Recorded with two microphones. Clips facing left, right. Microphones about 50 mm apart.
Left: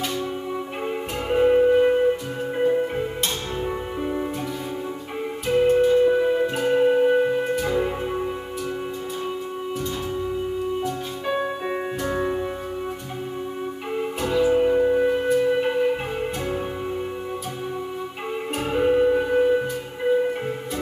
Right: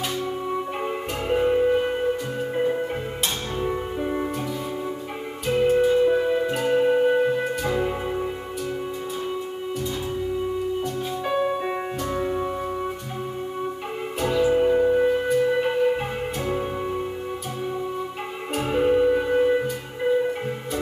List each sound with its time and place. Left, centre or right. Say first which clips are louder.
1.3 s music: left 3 dB; centre
3.6 s music: right 3 dB; centre
5.5 s music: left 1 dB; centre
11.4 s music: right 2 dB; centre
12.1 s music: left 2 dB; centre
14.3 s music: left 1 dB; centre
18.7 s music: even; centre